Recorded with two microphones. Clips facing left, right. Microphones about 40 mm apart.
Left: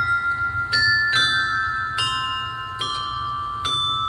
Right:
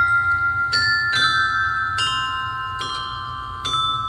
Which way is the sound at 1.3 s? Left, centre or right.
Centre.